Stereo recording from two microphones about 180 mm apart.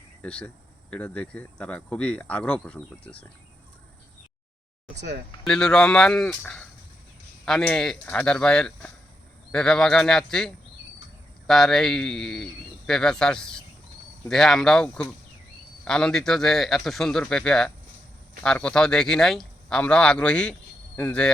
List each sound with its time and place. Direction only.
0.2 s speech: 5° left (ahead or behind)
5.4 s speech: 5° left (ahead or behind)